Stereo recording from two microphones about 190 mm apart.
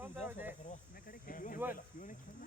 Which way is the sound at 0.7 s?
50° left (ahead or behind).